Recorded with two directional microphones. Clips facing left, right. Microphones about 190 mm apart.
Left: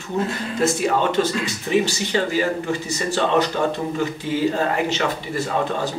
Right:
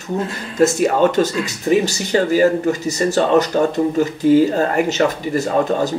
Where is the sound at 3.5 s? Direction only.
40° right (ahead or behind).